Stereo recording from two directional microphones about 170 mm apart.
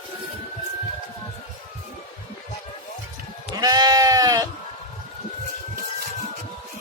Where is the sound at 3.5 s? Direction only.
20° right (ahead or behind).